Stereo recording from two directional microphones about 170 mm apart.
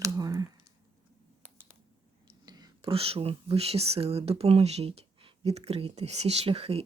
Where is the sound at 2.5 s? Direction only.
25° right (ahead or behind).